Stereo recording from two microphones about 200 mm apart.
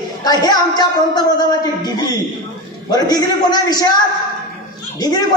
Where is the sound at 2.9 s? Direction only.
20° left (ahead or behind).